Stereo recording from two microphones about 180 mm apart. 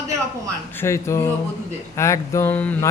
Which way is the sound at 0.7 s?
15° left (ahead or behind).